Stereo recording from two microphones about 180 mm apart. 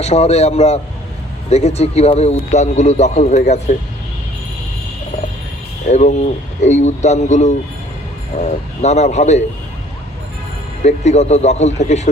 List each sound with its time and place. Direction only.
0.0 s a man's voice: 35° left (ahead or behind)
5.9 s a man's voice: 40° left (ahead or behind)
10.8 s a man's voice: 40° left (ahead or behind)